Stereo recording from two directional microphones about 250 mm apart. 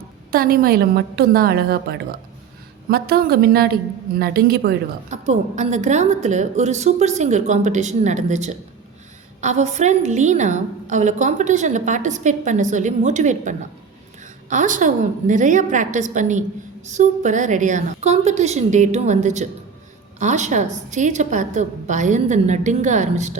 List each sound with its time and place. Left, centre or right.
0.3 s a woman's voice: right
5.1 s a woman's voice: right